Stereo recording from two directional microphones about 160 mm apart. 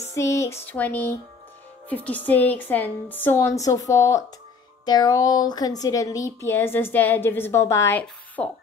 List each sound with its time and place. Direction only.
0.1 s a woman's voice: 15° left (ahead or behind)